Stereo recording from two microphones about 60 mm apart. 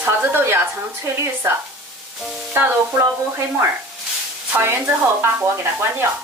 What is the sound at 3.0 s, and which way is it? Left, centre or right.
Stir, right.